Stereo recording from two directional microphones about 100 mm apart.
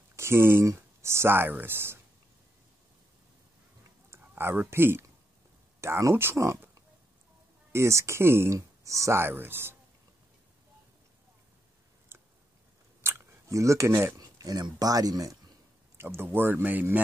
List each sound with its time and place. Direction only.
0.1 s speech: 25° right (ahead or behind)
4.1 s speech: 25° right (ahead or behind)
7.7 s speech: 30° right (ahead or behind)
12.1 s a sound: 25° right (ahead or behind)
14.2 s speech: 40° right (ahead or behind)
16.0 s speech: 25° right (ahead or behind)